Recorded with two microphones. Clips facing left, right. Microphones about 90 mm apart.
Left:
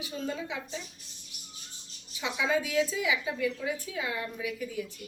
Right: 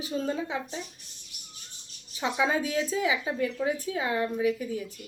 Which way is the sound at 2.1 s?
35° right (ahead or behind).